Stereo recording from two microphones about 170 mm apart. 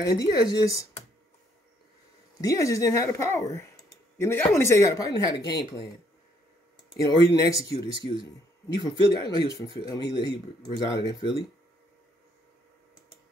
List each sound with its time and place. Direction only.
0.0 s speech: 20° left (ahead or behind)
2.4 s speech: 20° left (ahead or behind)
7.0 s speech: 20° left (ahead or behind)
7.7 s speech: 30° right (ahead or behind)
8.7 s speech: 25° left (ahead or behind)